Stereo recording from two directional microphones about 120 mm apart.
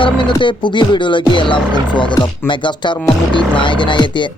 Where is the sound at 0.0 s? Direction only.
40° left (ahead or behind).